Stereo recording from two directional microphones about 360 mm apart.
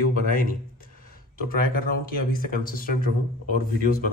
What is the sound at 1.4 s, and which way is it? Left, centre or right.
A man's voice, left.